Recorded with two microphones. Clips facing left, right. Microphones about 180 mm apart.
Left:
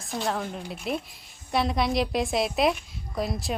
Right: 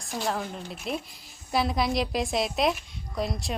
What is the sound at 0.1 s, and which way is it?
A woman's voice, centre (ahead or behind).